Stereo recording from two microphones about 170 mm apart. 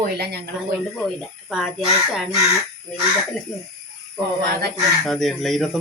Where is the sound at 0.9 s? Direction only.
Centre (ahead or behind).